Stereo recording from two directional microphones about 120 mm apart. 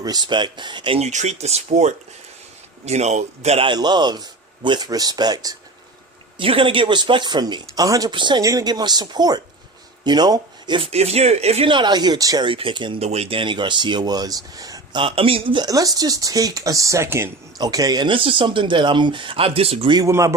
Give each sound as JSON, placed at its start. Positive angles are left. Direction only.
{"t": 0.0, "sound": "speech", "side_deg": -35}
{"t": 0.9, "sound": "speech", "side_deg": -70}
{"t": 3.7, "sound": "speech", "side_deg": -40}
{"t": 6.3, "sound": "speech", "side_deg": -45}
{"t": 10.8, "sound": "speech", "side_deg": -60}
{"t": 11.7, "sound": "speech", "side_deg": -40}
{"t": 12.5, "sound": "speech", "side_deg": -45}
{"t": 13.0, "sound": "speech", "side_deg": -60}
{"t": 13.4, "sound": "speech", "side_deg": -40}
{"t": 15.0, "sound": "speech", "side_deg": -50}
{"t": 15.6, "sound": "speech", "side_deg": -30}
{"t": 17.6, "sound": "speech", "side_deg": -30}
{"t": 19.9, "sound": "speech", "side_deg": -30}